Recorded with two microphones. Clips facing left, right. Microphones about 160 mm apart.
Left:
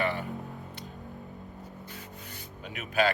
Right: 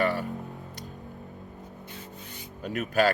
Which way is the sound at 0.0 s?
40° right (ahead or behind).